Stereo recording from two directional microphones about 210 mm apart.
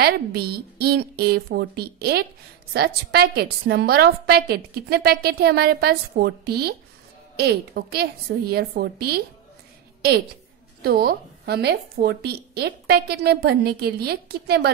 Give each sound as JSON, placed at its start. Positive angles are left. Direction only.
{"t": 0.0, "sound": "a woman's voice", "side_deg": -50}
{"t": 10.8, "sound": "a woman's voice", "side_deg": -45}